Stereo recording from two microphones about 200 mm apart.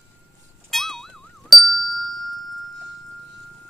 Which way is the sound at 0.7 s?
Centre (ahead or behind).